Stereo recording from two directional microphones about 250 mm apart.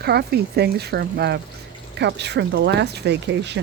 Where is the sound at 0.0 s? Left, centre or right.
Right.